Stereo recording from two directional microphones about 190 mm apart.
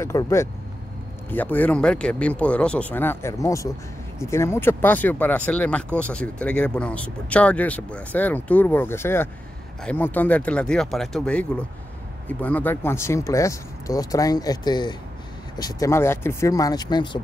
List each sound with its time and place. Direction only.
0.0 s speech: 15° left (ahead or behind)